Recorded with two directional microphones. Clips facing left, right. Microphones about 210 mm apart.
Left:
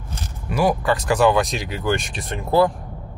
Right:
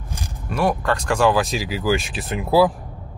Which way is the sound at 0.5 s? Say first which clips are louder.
Left 1 dB; 5° left (ahead or behind).